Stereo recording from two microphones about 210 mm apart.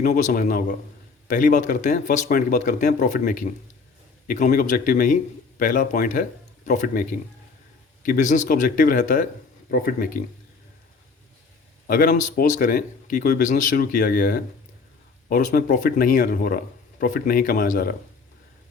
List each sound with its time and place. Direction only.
0.0 s speech: 40° left (ahead or behind)
8.0 s speech: 40° left (ahead or behind)
11.9 s speech: 40° left (ahead or behind)